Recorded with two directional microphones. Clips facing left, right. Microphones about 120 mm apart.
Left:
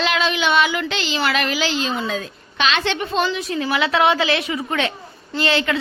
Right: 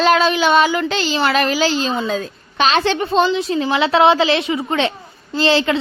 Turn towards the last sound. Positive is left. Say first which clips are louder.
# right 4 dB
turn(degrees=-30)  # may be behind; listen again after turning